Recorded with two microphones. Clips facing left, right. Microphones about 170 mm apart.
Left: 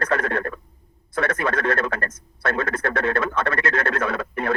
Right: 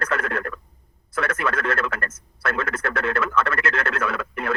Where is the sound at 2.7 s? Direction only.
30° left (ahead or behind).